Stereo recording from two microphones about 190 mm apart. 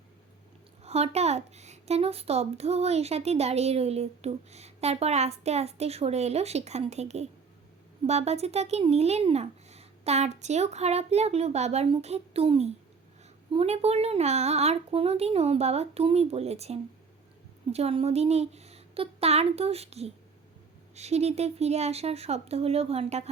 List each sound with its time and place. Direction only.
0.9 s a woman's voice: 35° right (ahead or behind)